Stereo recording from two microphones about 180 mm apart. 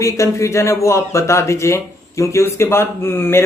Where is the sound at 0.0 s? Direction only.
15° left (ahead or behind).